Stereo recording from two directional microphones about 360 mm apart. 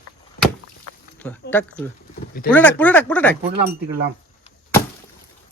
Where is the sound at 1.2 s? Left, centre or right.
Centre.